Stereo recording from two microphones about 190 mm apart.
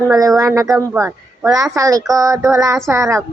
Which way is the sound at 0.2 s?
20° right (ahead or behind).